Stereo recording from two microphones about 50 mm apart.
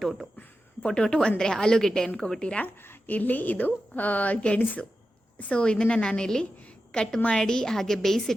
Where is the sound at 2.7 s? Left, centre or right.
Left.